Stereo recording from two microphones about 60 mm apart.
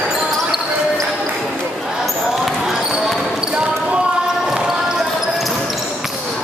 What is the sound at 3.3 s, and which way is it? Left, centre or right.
Basketball bounce, centre.